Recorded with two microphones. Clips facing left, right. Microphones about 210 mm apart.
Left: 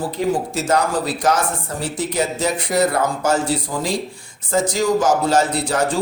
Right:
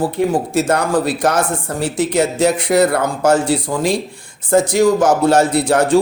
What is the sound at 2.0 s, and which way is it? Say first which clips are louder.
Speech: right 7 dB; 80° right.